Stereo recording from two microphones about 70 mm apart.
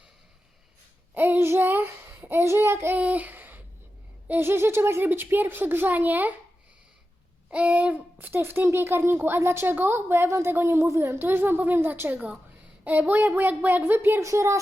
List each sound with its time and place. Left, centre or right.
1.1 s child singing: right
3.0 s a sound: right
4.3 s a child's voice: right
7.5 s a woman's voice: centre; by 11.2 s right
11.2 s a woman's voice: right
14.2 s a woman's voice: right